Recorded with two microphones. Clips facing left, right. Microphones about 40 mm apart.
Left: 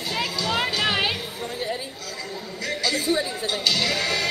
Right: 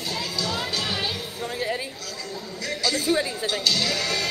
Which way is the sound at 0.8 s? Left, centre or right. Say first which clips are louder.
Left 5 dB; left.